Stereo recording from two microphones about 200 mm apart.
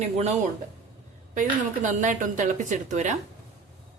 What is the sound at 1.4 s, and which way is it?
Speech, 40° right (ahead or behind).